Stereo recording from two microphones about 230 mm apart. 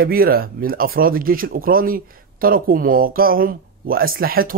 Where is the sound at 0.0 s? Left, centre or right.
Right.